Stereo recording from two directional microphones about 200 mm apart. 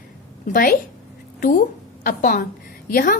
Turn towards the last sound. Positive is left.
turn(degrees=45)  # may be behind; listen again after turning